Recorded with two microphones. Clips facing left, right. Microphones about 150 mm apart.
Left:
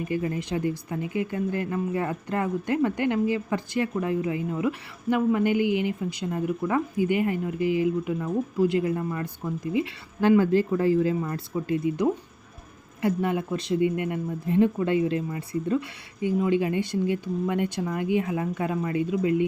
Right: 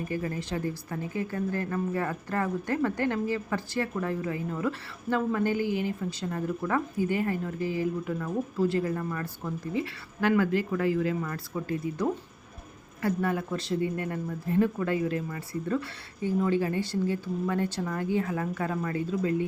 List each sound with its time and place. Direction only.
0.1 s a woman's voice: 20° left (ahead or behind)